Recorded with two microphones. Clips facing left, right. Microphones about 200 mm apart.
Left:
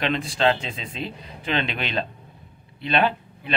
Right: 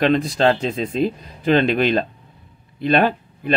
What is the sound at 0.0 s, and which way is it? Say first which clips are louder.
Speech: right 6 dB; 40° right (ahead or behind).